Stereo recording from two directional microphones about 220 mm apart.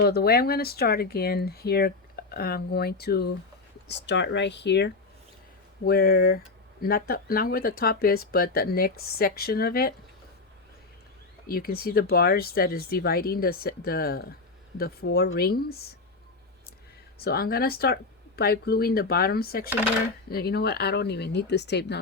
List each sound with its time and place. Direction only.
0.0 s speech: 45° left (ahead or behind)
11.4 s speech: 40° left (ahead or behind)
17.2 s speech: 45° left (ahead or behind)